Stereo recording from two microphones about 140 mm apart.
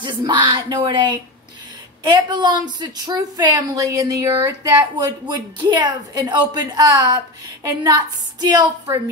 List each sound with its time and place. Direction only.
0.0 s a woman's voice: 35° right (ahead or behind)